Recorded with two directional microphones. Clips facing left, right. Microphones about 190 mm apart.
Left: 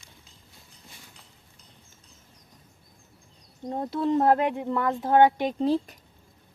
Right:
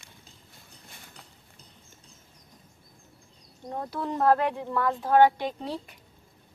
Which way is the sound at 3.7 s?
25° left (ahead or behind).